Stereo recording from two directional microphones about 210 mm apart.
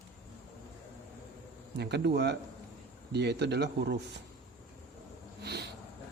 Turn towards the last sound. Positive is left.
turn(degrees=-50)  # may be behind; listen again after turning